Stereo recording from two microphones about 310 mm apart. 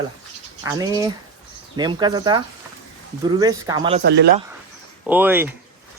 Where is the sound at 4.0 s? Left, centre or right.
Right.